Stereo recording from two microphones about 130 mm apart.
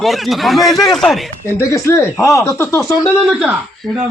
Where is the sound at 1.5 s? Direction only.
20° left (ahead or behind).